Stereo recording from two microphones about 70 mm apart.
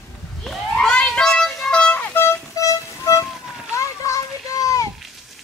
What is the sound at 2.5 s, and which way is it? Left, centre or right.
Music, left.